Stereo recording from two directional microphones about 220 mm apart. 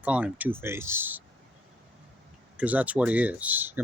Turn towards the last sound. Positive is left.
turn(degrees=-10)  # may be behind; listen again after turning